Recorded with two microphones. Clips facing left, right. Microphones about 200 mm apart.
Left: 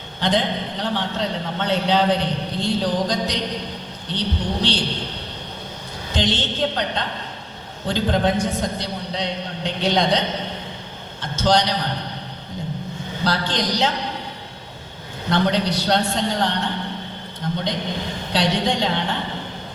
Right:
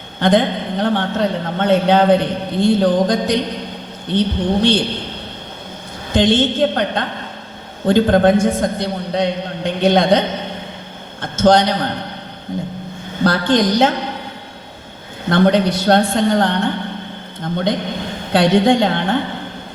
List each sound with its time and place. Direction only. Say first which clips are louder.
0.2 s a man's voice: right 7 dB; 55° right (ahead or behind)
6.1 s a man's voice: right 9 dB; 55° right (ahead or behind)
13.2 s a man's voice: right 8 dB; 50° right (ahead or behind)
15.3 s a man's voice: right 7 dB; 55° right (ahead or behind)